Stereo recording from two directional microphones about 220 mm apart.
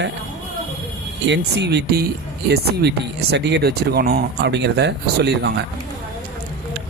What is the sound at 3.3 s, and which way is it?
Speech, 50° right (ahead or behind).